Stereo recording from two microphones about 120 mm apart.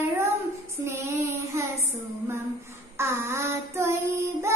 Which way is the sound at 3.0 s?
20° right (ahead or behind).